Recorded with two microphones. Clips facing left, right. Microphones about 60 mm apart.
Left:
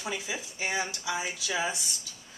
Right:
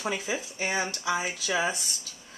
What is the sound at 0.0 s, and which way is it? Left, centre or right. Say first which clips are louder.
Speech: right 4 dB; right.